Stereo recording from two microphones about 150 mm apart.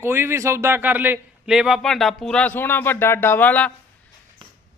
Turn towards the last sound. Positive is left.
turn(degrees=10)  # may be behind; listen again after turning